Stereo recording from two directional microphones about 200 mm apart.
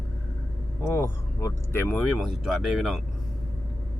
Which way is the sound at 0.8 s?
15° left (ahead or behind).